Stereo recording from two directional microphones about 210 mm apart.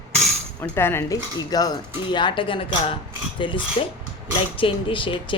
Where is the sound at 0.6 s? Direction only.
10° left (ahead or behind).